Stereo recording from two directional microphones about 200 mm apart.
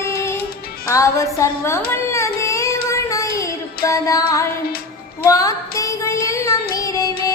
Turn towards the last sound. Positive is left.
turn(degrees=15)  # may be behind; listen again after turning